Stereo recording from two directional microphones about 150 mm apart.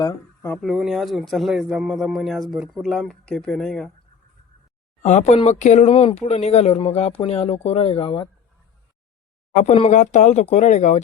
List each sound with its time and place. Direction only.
0.0 s speech: 25° left (ahead or behind)
0.5 s speech: centre (ahead or behind)
5.0 s speech: 50° left (ahead or behind); by 8.3 s 35° left (ahead or behind)
9.6 s speech: 45° left (ahead or behind)